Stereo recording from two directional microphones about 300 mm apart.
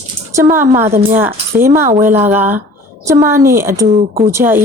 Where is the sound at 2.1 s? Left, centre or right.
Centre.